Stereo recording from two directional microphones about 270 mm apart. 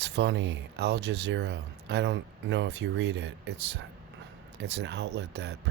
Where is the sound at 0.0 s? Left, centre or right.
Right.